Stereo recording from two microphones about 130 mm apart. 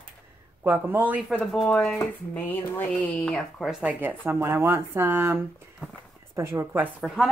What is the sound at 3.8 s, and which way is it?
Speech, 15° right (ahead or behind).